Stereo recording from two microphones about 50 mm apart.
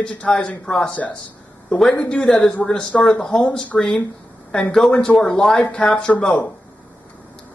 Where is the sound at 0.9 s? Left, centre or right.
Left.